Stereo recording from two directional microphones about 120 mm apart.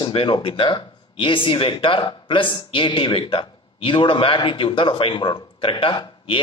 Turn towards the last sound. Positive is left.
turn(degrees=40)  # may be behind; listen again after turning